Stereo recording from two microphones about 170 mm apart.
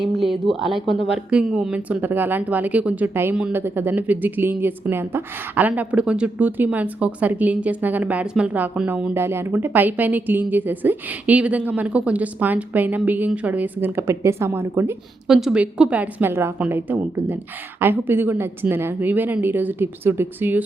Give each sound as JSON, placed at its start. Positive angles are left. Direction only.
{"t": 0.0, "sound": "a sound", "side_deg": 0}
{"t": 0.4, "sound": "speech", "side_deg": -30}
{"t": 0.7, "sound": "speech", "side_deg": 0}
{"t": 15.3, "sound": "speech", "side_deg": -5}